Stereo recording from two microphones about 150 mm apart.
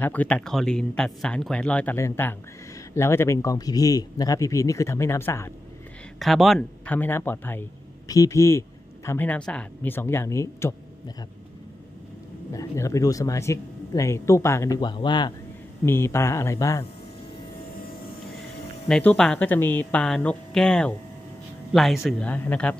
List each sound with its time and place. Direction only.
0.0 s speech: 10° left (ahead or behind)
6.1 s speech: centre (ahead or behind)
7.0 s speech: 15° left (ahead or behind)
12.5 s speech: 20° left (ahead or behind)
15.8 s speech: 15° left (ahead or behind)
18.9 s speech: 5° left (ahead or behind)
22.2 s speech: 10° left (ahead or behind)